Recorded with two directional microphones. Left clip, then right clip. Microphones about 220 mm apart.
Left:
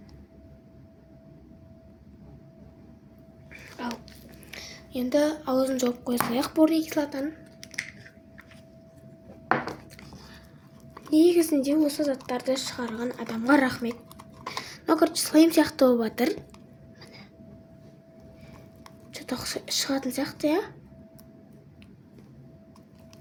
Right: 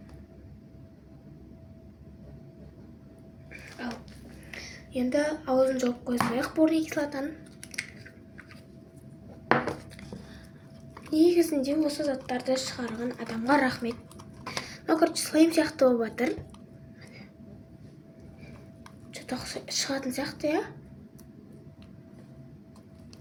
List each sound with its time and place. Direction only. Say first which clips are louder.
3.5 s a sound: left 3 dB; 50° left (ahead or behind)
4.5 s speech: even; 50° left (ahead or behind)
7.6 s typing: left 2 dB; centre (ahead or behind)
11.1 s speech: left 2 dB; 45° left (ahead or behind)
19.1 s speech: left 3 dB; 50° left (ahead or behind)